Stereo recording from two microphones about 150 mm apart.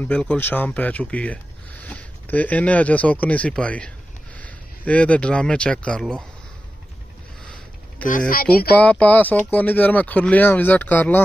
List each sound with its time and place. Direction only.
0.0 s speech: 5° left (ahead or behind)
8.3 s speech: 80° left
8.7 s speech: 10° left (ahead or behind)